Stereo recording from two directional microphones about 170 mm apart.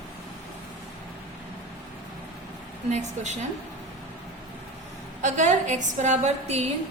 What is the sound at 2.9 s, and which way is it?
Speech, 45° right (ahead or behind).